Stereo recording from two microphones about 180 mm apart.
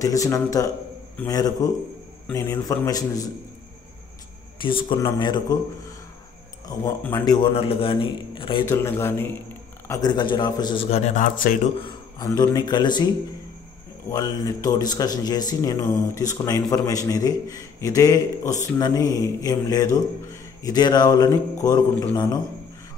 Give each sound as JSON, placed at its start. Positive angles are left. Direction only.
{"t": 0.0, "sound": "a man's voice", "side_deg": 20}
{"t": 4.6, "sound": "a man's voice", "side_deg": 30}
{"t": 7.0, "sound": "a man's voice", "side_deg": 15}
{"t": 7.5, "sound": "a man's voice", "side_deg": 30}
{"t": 8.6, "sound": "a man's voice", "side_deg": 15}
{"t": 11.8, "sound": "a man's voice", "side_deg": 20}
{"t": 14.1, "sound": "a man's voice", "side_deg": 20}